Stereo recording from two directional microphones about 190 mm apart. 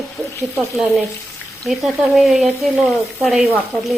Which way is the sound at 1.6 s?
Centre (ahead or behind).